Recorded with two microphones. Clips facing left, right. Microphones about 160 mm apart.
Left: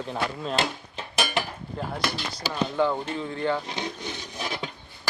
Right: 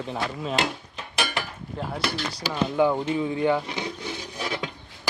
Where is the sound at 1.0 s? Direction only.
25° left (ahead or behind).